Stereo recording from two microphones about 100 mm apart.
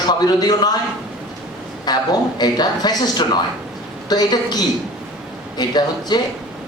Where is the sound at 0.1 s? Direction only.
45° left (ahead or behind).